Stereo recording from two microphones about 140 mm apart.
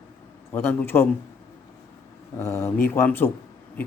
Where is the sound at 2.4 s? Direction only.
20° left (ahead or behind).